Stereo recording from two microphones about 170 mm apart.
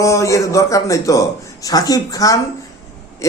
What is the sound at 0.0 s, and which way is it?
A man's voice, 20° left (ahead or behind).